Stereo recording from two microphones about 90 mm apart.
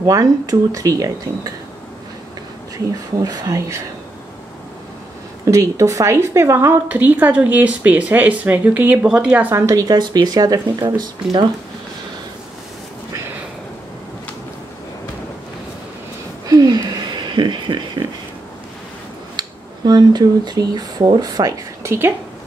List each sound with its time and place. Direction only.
0.0 s speech: 40° right (ahead or behind)
2.9 s speech: 40° right (ahead or behind)
5.4 s speech: 35° right (ahead or behind)
6.9 s speech: 20° right (ahead or behind); by 9.9 s 35° right (ahead or behind)
9.9 s speech: 50° right (ahead or behind)
16.4 s a sound: 45° right (ahead or behind)
19.3 s speech: 50° right (ahead or behind)